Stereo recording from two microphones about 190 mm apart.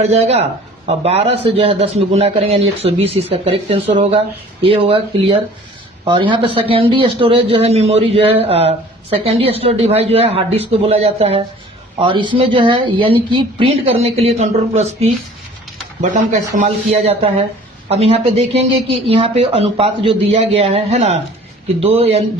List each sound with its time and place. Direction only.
0.0 s a man's voice: 35° right (ahead or behind)
16.0 s a man's voice: 40° right (ahead or behind)